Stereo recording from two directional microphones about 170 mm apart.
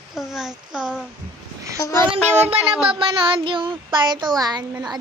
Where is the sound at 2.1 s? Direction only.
35° right (ahead or behind).